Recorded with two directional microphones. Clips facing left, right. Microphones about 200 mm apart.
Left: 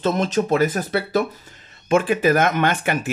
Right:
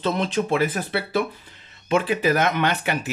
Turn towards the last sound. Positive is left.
turn(degrees=50)  # may be behind; listen again after turning